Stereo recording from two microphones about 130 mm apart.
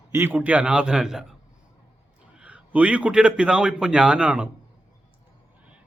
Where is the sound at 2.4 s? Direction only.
10° right (ahead or behind).